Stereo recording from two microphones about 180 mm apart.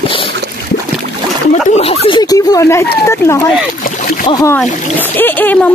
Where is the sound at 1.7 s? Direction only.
35° left (ahead or behind); by 3.4 s 15° left (ahead or behind).